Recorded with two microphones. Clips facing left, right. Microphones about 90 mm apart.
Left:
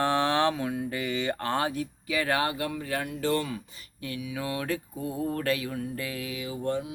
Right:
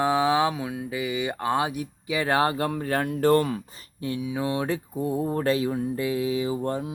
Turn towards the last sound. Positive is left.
turn(degrees=-35)  # may be behind; listen again after turning